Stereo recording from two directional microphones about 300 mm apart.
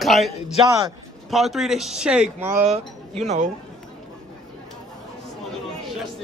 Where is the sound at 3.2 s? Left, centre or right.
Right.